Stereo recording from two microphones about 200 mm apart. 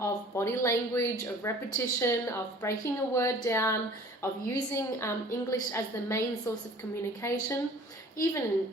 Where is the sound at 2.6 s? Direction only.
15° left (ahead or behind).